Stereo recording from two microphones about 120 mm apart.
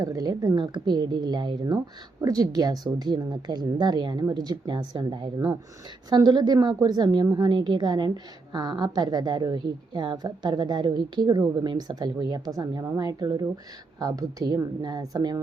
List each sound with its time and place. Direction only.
0.0 s a woman's voice: 30° right (ahead or behind)